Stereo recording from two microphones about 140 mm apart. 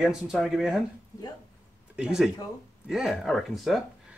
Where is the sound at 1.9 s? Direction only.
5° right (ahead or behind).